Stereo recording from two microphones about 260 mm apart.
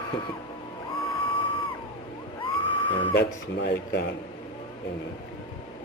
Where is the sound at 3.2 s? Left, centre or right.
Left.